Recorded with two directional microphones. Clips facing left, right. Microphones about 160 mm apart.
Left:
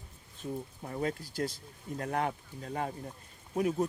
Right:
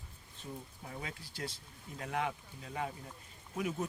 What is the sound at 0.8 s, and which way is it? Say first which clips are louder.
Speech: left 12 dB; 50° left (ahead or behind).